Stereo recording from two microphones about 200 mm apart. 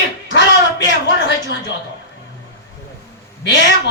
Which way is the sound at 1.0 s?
60° left (ahead or behind).